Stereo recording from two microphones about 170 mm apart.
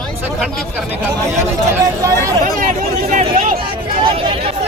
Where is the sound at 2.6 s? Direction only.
50° right (ahead or behind).